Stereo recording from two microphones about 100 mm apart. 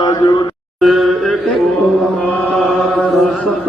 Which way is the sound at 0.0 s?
40° left (ahead or behind).